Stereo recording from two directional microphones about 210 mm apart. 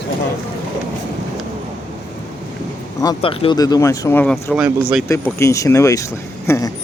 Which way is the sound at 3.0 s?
20° left (ahead or behind).